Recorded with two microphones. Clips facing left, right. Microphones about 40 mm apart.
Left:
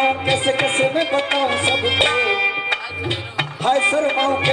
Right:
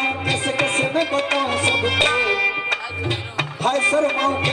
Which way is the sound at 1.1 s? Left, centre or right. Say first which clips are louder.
Left 2 dB; centre.